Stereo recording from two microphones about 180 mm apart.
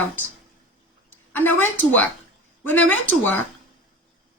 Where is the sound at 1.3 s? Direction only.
10° left (ahead or behind).